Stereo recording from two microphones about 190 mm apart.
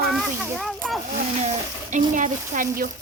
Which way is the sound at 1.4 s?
40° right (ahead or behind).